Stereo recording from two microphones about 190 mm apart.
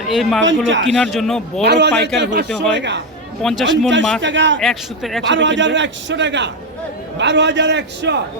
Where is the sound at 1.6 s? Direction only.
65° right (ahead or behind).